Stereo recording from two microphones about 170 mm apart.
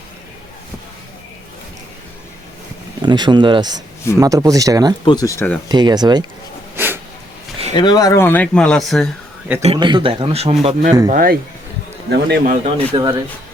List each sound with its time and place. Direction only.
3.0 s speech: 25° right (ahead or behind)
5.0 s speech: 20° left (ahead or behind)
5.6 s speech: 25° right (ahead or behind)
6.7 s snort: 10° right (ahead or behind)
7.7 s speech: 25° left (ahead or behind); by 9.0 s centre (ahead or behind)
9.7 s speech: 25° right (ahead or behind)
11.1 s speech: 60° right (ahead or behind)
12.1 s speech: 80° right
12.7 s speech: 30° right (ahead or behind)